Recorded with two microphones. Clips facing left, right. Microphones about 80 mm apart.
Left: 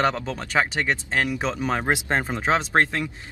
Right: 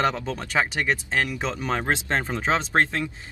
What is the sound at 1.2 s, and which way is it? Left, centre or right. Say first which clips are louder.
Speech: left 3 dB; centre.